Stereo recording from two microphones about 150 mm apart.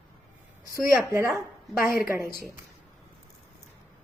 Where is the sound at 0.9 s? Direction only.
15° right (ahead or behind).